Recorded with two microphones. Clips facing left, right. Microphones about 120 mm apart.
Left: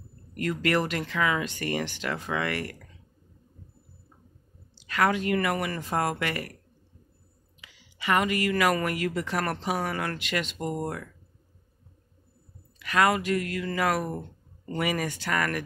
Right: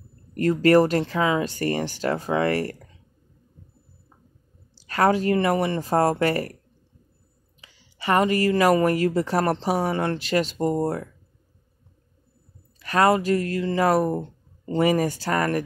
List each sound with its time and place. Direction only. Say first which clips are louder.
0.3 s speech: right 9 dB; 35° right (ahead or behind)
4.7 s speech: right 5 dB; 35° right (ahead or behind)
7.6 s speech: right 4 dB; 35° right (ahead or behind)
12.7 s speech: right 5 dB; 35° right (ahead or behind)